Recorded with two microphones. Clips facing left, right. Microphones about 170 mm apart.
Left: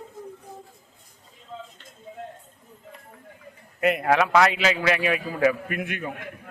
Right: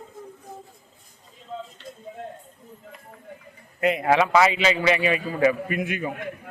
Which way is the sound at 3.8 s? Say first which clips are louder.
Right 1 dB; centre (ahead or behind).